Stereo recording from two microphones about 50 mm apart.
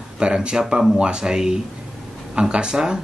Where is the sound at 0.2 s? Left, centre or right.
Centre.